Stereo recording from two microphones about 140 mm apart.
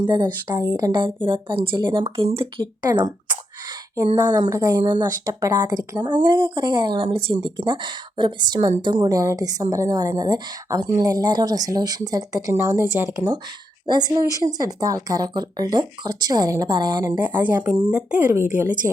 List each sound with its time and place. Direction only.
0.0 s a woman's voice: 35° right (ahead or behind)
17.2 s speech: 15° right (ahead or behind)
18.3 s a woman's voice: 20° right (ahead or behind)